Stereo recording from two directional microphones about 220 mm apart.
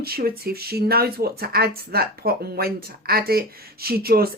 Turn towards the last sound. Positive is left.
turn(degrees=-45)  # may be behind; listen again after turning